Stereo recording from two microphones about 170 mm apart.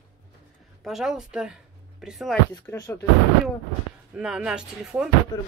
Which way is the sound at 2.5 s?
20° left (ahead or behind).